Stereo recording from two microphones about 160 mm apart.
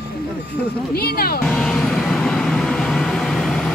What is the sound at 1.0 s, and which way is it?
Speech, 75° left (ahead or behind).